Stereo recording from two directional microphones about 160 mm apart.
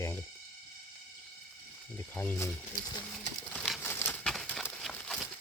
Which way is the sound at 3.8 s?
15° left (ahead or behind).